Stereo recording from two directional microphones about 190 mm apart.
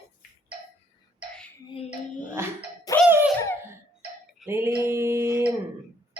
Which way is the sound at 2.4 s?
15° right (ahead or behind).